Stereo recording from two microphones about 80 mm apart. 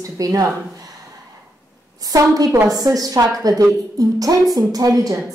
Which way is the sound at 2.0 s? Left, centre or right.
Right.